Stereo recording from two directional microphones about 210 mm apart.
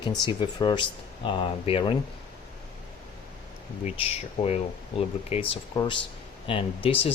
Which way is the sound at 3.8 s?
30° left (ahead or behind).